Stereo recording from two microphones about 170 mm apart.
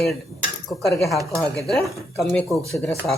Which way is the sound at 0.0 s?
Centre (ahead or behind).